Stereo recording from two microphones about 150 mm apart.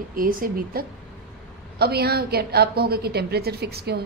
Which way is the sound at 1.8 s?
90° right.